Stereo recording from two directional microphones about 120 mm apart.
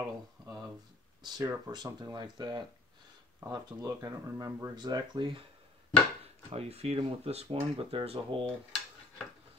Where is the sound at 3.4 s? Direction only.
25° right (ahead or behind); by 5.5 s 45° right (ahead or behind).